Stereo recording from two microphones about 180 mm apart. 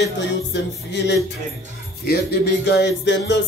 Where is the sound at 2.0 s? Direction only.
65° left (ahead or behind).